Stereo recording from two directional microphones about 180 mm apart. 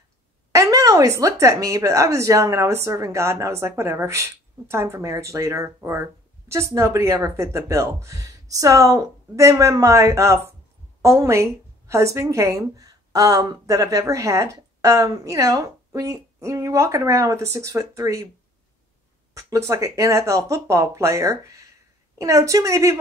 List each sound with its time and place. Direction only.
0.5 s a woman's voice: 20° right (ahead or behind)
19.3 s a woman's voice: 15° right (ahead or behind)